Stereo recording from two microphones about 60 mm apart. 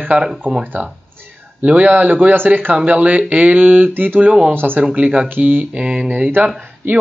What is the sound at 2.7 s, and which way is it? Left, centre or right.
Speech, right.